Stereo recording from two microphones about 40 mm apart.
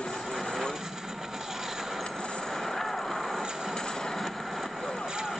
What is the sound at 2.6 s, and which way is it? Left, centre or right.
Vehicle, centre.